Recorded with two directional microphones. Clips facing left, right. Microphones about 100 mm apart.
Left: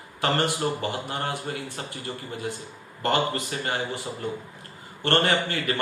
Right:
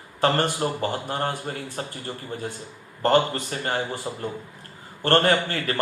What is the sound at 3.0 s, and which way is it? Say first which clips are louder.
Speech: right 4 dB; 40° right (ahead or behind).